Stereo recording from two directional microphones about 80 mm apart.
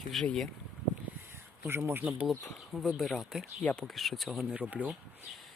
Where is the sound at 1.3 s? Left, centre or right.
Right.